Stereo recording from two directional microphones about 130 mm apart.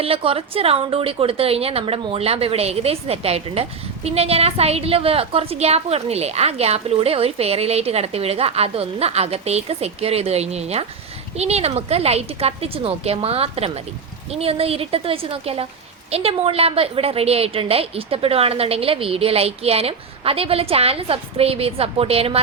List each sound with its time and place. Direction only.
0.0 s a woman's voice: 45° right (ahead or behind)